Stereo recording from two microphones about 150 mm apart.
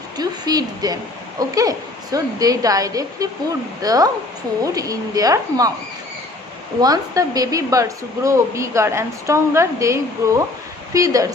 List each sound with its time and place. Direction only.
0.2 s a woman's voice: 25° right (ahead or behind)
6.8 s a woman's voice: 25° right (ahead or behind)